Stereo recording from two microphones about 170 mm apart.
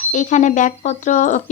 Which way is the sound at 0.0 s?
45° left (ahead or behind).